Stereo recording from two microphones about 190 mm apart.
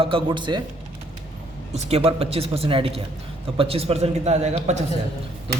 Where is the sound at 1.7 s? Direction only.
35° right (ahead or behind).